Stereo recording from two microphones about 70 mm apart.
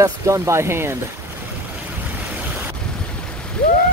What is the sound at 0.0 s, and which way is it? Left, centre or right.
Speech, right.